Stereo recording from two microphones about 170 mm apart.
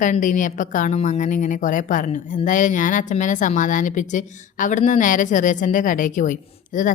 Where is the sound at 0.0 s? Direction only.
50° left (ahead or behind).